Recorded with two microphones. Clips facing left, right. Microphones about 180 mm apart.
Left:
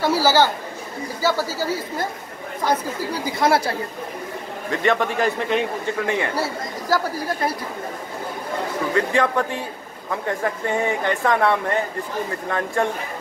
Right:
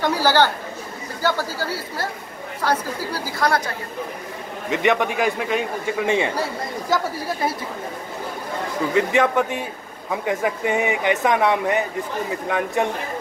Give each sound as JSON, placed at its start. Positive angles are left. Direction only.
{"t": 0.0, "sound": "speech", "side_deg": 10}
{"t": 4.6, "sound": "speech", "side_deg": -15}
{"t": 5.9, "sound": "speech", "side_deg": -20}
{"t": 8.9, "sound": "speech", "side_deg": -15}